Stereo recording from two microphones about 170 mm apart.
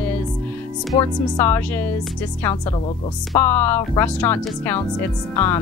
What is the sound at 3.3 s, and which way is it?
Speech, 10° left (ahead or behind).